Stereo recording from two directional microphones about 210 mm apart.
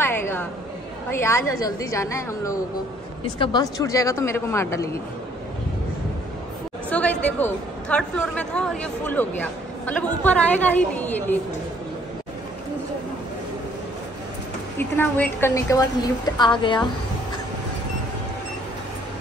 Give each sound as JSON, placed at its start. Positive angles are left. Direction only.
{"t": 0.0, "sound": "a sound", "side_deg": 10}
{"t": 1.1, "sound": "a woman's voice", "side_deg": 10}
{"t": 6.9, "sound": "a woman's voice", "side_deg": 5}
{"t": 14.8, "sound": "a woman's voice", "side_deg": 10}